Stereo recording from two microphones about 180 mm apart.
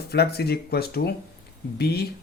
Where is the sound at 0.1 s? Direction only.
65° left (ahead or behind).